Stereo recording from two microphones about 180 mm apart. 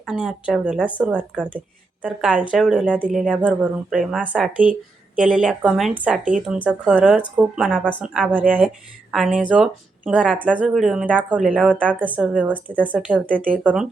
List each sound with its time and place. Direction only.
0.0 s speech: 5° right (ahead or behind)
11.7 s a woman's voice: 5° left (ahead or behind)
11.9 s speech: 10° right (ahead or behind)